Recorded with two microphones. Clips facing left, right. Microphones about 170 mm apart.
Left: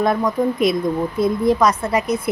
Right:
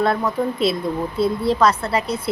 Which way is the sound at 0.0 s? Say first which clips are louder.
Left 2 dB; 15° left (ahead or behind).